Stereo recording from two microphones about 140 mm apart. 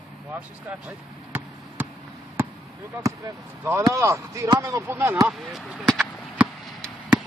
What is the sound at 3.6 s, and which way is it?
Speech, 20° right (ahead or behind).